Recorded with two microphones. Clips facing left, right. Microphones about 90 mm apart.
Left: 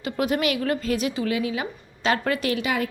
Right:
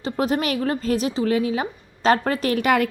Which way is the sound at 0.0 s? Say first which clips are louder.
Right 1 dB; 30° right (ahead or behind).